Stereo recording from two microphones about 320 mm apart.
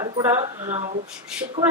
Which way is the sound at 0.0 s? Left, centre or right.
Centre.